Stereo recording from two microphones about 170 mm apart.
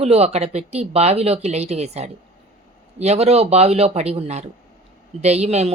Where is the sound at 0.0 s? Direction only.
40° right (ahead or behind).